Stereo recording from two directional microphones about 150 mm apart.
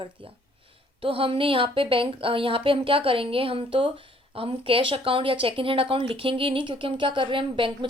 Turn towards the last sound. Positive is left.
turn(degrees=-35)  # may be behind; listen again after turning